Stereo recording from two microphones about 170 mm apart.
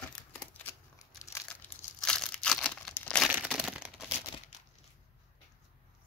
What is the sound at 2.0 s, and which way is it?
Crumpling, 5° left (ahead or behind).